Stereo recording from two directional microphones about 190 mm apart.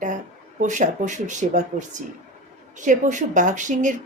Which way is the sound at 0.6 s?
40° right (ahead or behind).